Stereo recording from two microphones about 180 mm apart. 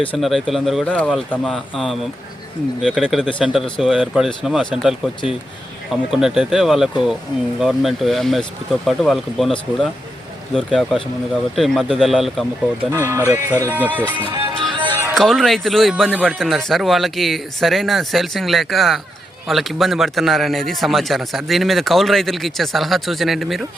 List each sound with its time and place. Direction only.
0.2 s a man's voice: centre (ahead or behind)
10.5 s a man's voice: centre (ahead or behind)
12.9 s speech: 15° right (ahead or behind)
14.7 s music: 25° right (ahead or behind)
15.1 s a man's voice: centre (ahead or behind)